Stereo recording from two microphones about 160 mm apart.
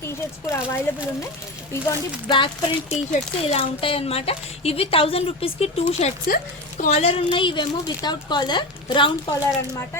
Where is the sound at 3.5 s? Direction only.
35° left (ahead or behind).